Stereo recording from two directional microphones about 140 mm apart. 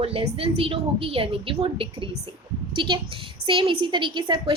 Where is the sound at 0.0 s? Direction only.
45° right (ahead or behind).